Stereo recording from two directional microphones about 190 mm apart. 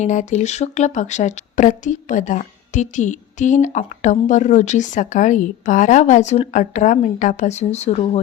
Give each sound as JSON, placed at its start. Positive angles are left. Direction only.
{"t": 0.0, "sound": "a woman's voice", "side_deg": 40}